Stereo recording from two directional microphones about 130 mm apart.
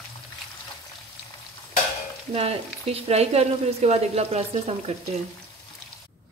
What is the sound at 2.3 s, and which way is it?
Speech, 50° right (ahead or behind).